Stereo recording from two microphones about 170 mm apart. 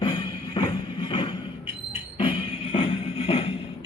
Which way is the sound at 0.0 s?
25° left (ahead or behind).